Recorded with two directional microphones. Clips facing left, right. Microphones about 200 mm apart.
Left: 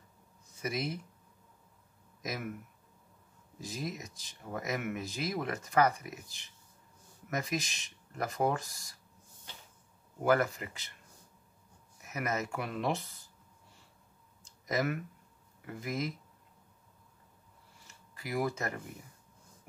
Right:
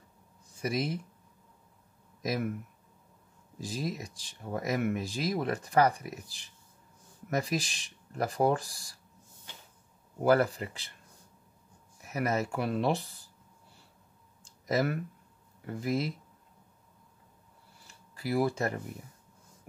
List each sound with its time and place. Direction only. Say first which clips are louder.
0.6 s speech: right 4 dB; 30° right (ahead or behind)
2.2 s speech: right 7 dB; 30° right (ahead or behind)
3.6 s speech: right 4 dB; 35° right (ahead or behind)
10.2 s speech: right 3 dB; 35° right (ahead or behind)
12.0 s speech: right 5 dB; 35° right (ahead or behind)
14.4 s a sound: right 3 dB; 35° right (ahead or behind)
15.6 s speech: right 5 dB; 35° right (ahead or behind)
17.8 s a sound: right 8 dB; 30° right (ahead or behind)